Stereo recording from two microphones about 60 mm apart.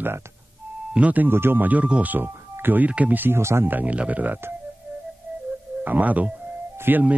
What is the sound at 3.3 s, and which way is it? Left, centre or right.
Speech, right.